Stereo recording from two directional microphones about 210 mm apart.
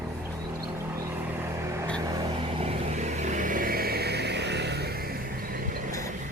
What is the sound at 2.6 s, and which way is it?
Vehicle, 30° right (ahead or behind).